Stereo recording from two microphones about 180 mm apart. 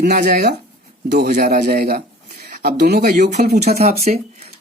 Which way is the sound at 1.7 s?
60° right (ahead or behind).